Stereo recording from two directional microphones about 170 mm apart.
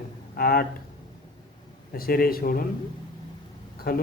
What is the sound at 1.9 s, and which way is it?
Speech, 60° left (ahead or behind).